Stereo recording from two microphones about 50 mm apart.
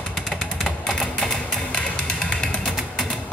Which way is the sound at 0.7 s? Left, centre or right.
Centre.